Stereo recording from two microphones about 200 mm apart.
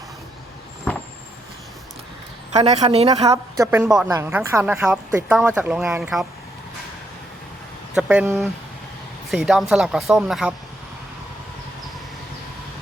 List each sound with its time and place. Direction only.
2.6 s speech: 35° right (ahead or behind)
3.2 s speech: 15° right (ahead or behind)
7.9 s speech: 5° right (ahead or behind)